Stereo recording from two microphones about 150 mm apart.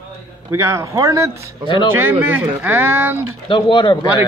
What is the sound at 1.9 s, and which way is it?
Speech, 15° right (ahead or behind).